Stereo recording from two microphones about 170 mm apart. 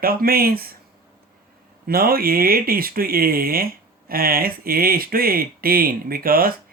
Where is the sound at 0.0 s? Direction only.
60° right (ahead or behind).